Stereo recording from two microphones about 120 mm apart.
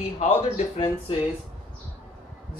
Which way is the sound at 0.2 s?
55° left (ahead or behind).